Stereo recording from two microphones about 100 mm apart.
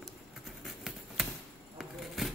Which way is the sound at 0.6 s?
Centre (ahead or behind).